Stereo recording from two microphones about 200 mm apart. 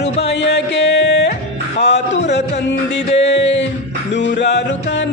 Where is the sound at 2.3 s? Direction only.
60° left (ahead or behind).